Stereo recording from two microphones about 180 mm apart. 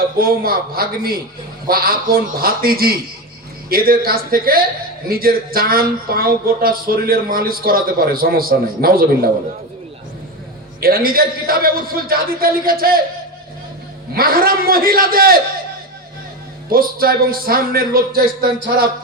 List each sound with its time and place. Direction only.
0.2 s speech: 55° right (ahead or behind)
10.8 s speech: 55° right (ahead or behind)
14.2 s speech: 55° right (ahead or behind)
16.6 s speech: 55° right (ahead or behind)